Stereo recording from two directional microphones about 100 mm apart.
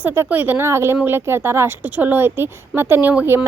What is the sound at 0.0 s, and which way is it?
A woman's voice, 20° right (ahead or behind).